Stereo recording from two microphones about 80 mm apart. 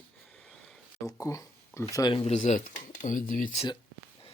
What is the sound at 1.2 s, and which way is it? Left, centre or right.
Speech, left.